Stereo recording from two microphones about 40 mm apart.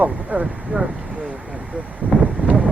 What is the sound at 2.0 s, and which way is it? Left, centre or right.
Speech, right.